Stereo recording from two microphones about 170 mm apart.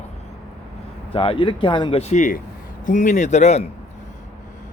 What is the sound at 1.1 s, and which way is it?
Speech, 30° left (ahead or behind).